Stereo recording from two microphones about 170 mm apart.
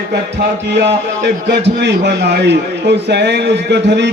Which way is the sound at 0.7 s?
90° right.